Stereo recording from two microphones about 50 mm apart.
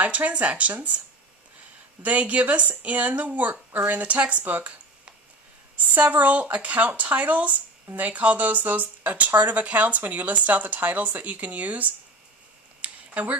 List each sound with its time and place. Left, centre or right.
0.0 s speech: right
2.0 s speech: right
5.9 s speech: right
12.8 s a sound: right